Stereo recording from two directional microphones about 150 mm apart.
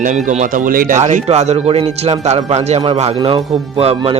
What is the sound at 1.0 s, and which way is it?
Speech, 50° right (ahead or behind).